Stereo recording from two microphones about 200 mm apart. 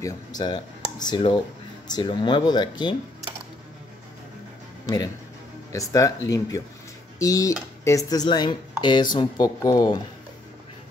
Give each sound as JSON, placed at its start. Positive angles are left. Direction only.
{"t": 0.4, "sound": "speech", "side_deg": 20}
{"t": 4.8, "sound": "speech", "side_deg": 20}